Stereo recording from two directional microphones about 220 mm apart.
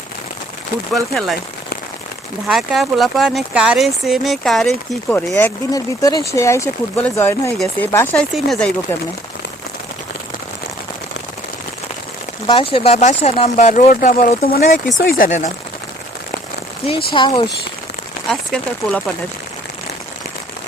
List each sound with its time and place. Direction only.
0.9 s speech: centre (ahead or behind)
2.5 s speech: centre (ahead or behind)
12.5 s speech: 25° left (ahead or behind)
17.2 s speech: 20° left (ahead or behind)
18.3 s speech: 5° left (ahead or behind)